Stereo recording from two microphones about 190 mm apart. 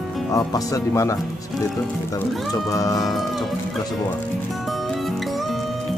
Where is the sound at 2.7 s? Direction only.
15° left (ahead or behind).